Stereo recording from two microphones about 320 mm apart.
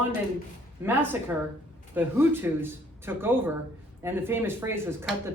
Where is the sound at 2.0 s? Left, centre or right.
Centre.